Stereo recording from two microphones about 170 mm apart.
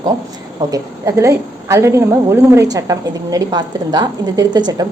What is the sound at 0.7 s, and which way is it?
A woman's voice, 15° right (ahead or behind).